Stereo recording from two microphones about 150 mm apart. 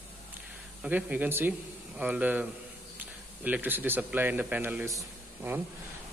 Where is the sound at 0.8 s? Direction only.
10° right (ahead or behind).